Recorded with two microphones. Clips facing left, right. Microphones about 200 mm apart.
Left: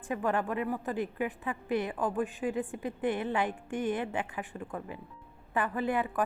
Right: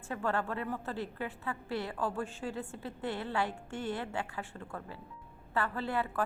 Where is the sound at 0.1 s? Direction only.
15° left (ahead or behind).